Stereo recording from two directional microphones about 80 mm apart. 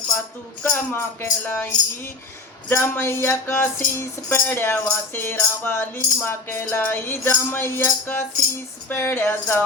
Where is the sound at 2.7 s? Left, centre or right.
Left.